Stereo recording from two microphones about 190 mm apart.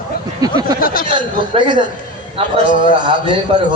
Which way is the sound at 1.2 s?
25° right (ahead or behind).